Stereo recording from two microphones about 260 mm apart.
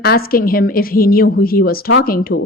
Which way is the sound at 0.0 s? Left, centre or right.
Left.